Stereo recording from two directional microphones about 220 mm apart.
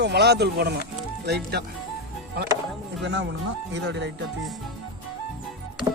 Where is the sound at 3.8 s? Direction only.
50° right (ahead or behind).